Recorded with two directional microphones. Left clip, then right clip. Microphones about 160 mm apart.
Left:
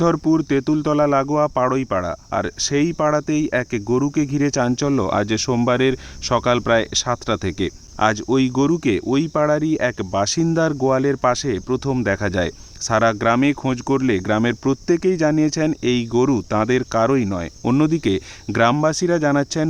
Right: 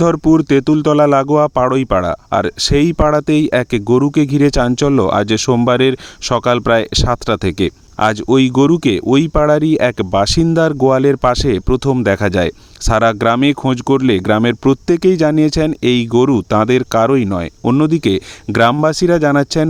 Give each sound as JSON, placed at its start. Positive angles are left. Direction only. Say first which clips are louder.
{"t": 0.0, "sound": "speech", "louder": "right 6 dB", "side_deg": -40}